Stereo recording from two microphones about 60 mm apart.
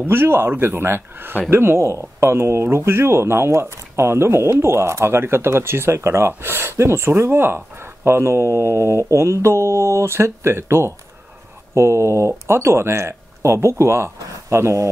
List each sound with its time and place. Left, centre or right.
0.0 s speech: right